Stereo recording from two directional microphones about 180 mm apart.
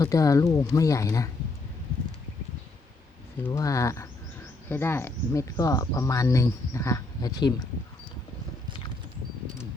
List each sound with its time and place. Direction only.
0.0 s speech: 20° left (ahead or behind)
3.4 s speech: 15° left (ahead or behind)